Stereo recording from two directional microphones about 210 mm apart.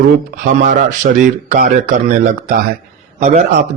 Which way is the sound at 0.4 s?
40° right (ahead or behind).